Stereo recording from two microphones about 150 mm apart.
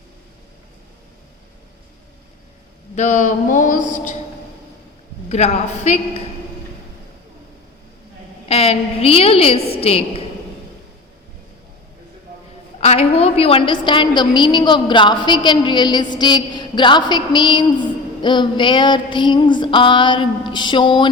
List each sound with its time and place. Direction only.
2.9 s a sound: 55° left (ahead or behind)
5.3 s a woman's voice: 50° left (ahead or behind)
8.4 s a woman's voice: 40° left (ahead or behind)
12.8 s a woman's voice: 45° left (ahead or behind)